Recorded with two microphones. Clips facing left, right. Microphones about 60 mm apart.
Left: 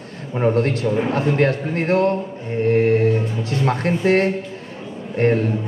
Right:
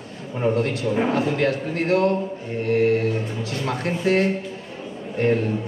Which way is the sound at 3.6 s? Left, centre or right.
Left.